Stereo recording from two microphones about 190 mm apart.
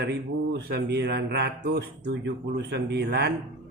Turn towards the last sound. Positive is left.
turn(degrees=-60)  # may be behind; listen again after turning